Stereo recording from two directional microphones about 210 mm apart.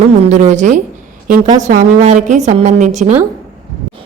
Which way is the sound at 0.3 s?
35° right (ahead or behind).